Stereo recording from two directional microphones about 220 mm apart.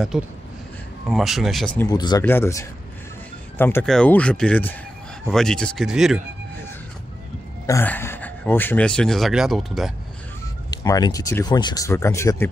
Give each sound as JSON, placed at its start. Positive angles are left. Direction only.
{"t": 0.1, "sound": "speech", "side_deg": 0}
{"t": 1.9, "sound": "speech", "side_deg": 20}
{"t": 7.6, "sound": "speech", "side_deg": 10}
{"t": 10.7, "sound": "speech", "side_deg": 15}